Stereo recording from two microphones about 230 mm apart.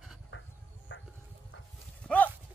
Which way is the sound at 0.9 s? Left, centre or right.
Left.